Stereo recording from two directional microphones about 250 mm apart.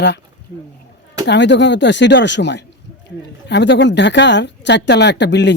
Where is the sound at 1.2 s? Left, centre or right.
Left.